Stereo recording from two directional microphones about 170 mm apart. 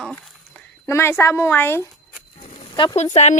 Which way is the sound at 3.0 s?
40° left (ahead or behind).